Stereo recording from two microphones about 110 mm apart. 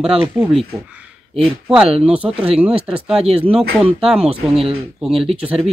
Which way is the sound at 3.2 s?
65° right (ahead or behind).